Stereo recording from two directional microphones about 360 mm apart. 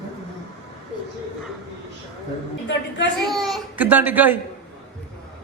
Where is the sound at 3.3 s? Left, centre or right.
Centre.